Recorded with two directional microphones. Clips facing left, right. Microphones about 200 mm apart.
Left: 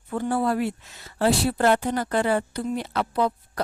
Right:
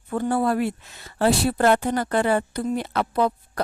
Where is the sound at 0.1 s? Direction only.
55° right (ahead or behind).